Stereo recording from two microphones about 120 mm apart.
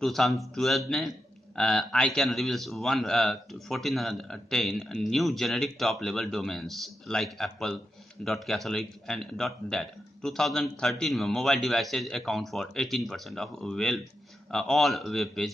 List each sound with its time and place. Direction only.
0.0 s a man's voice: centre (ahead or behind)